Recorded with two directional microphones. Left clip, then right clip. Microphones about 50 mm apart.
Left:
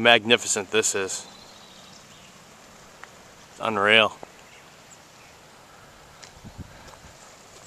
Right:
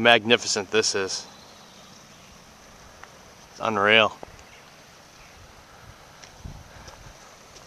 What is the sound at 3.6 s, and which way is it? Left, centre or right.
Speech, right.